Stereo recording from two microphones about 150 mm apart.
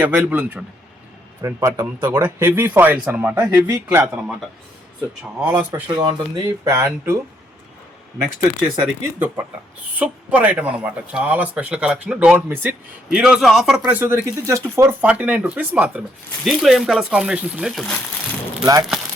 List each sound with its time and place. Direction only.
0.0 s speech: 10° right (ahead or behind)
1.4 s speech: 20° right (ahead or behind)
5.9 s speech: 30° right (ahead or behind)
10.0 s a man's voice: 10° right (ahead or behind)
13.8 s a man's voice: 15° right (ahead or behind)
18.6 s speech: 25° right (ahead or behind)